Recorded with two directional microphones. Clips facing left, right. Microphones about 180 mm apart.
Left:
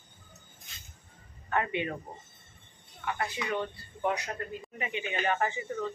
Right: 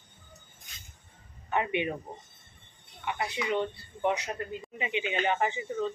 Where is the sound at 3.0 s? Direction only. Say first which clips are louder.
Right 1 dB; 20° right (ahead or behind).